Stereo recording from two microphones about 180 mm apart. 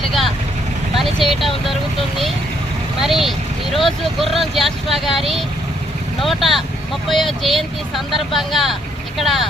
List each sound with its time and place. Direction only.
0.9 s vehicle: centre (ahead or behind)
3.0 s speech: centre (ahead or behind)